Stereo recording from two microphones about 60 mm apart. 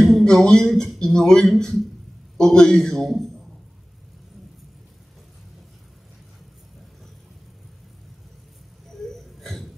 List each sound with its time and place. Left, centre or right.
0.0 s a man's voice: centre